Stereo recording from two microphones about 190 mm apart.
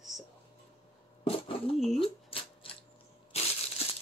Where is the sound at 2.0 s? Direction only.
30° left (ahead or behind).